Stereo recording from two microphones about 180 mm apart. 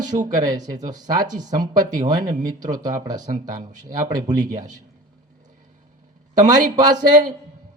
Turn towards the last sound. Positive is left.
turn(degrees=-20)  # may be behind; listen again after turning